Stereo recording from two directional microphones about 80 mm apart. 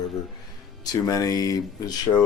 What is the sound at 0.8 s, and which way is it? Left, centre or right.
Speech, left.